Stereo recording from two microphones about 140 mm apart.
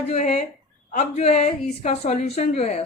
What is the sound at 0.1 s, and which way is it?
A woman's voice, 50° left (ahead or behind).